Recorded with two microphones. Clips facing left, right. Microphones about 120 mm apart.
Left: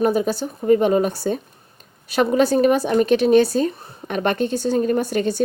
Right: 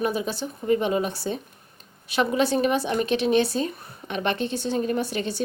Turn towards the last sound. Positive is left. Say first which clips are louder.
# left 6 dB
turn(degrees=45)  # may be behind; listen again after turning